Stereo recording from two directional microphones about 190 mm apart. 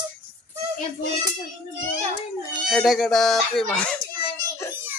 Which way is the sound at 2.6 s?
Centre (ahead or behind).